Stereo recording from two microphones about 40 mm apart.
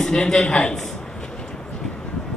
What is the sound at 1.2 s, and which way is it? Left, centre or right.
Vehicle, left.